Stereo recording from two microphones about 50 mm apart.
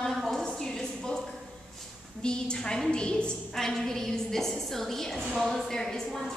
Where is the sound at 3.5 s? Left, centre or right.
Centre.